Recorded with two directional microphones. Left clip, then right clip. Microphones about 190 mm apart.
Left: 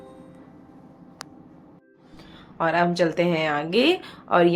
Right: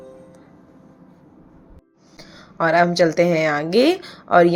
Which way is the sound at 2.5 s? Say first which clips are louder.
Right 5 dB; 25° right (ahead or behind).